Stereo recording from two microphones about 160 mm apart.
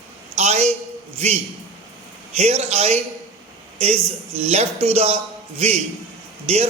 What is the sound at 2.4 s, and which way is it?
A man's voice, 40° right (ahead or behind).